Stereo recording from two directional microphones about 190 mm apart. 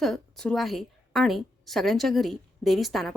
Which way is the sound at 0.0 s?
Centre (ahead or behind).